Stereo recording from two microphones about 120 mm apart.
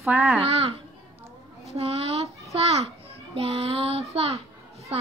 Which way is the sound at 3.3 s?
55° right (ahead or behind).